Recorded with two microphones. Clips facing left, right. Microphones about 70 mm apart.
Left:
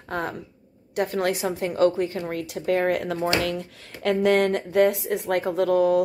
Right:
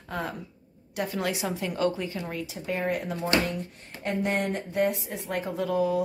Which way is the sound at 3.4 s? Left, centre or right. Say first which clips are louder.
Left 4 dB; left.